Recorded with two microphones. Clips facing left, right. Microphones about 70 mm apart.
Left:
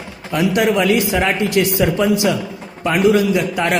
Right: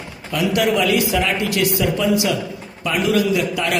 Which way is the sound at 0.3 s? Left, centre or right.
Left.